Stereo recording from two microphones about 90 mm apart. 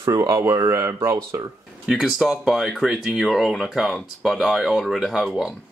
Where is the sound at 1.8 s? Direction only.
Centre (ahead or behind).